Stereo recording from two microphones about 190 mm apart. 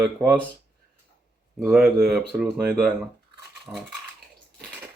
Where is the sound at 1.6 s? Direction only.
Centre (ahead or behind).